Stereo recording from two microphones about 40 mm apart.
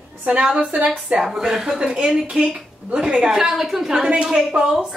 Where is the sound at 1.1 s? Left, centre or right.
Centre.